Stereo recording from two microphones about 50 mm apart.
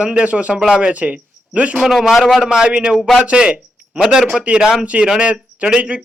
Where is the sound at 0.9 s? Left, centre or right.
Right.